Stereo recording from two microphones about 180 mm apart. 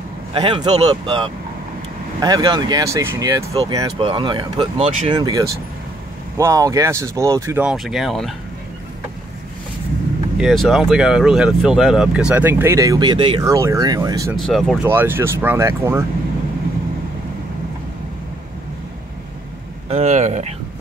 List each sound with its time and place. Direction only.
0.3 s speech: 25° right (ahead or behind)
7.7 s speech: centre (ahead or behind)
10.3 s speech: centre (ahead or behind); by 14.3 s 20° right (ahead or behind)
14.3 s speech: centre (ahead or behind)
14.9 s speech: 10° right (ahead or behind)
19.9 s speech: 40° right (ahead or behind)